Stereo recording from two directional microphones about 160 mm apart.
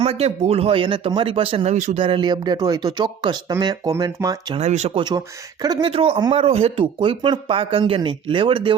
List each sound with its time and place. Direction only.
0.0 s speech: 40° right (ahead or behind); by 4.5 s 25° right (ahead or behind)
4.5 s speech: 45° right (ahead or behind)
4.9 s speech: 25° right (ahead or behind)